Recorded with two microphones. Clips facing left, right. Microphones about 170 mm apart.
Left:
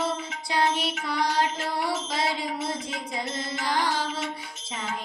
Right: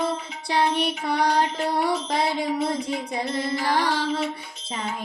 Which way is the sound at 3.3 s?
60° right (ahead or behind).